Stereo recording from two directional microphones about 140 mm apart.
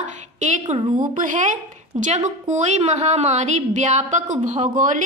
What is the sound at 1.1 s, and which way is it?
A woman's voice, 65° right (ahead or behind).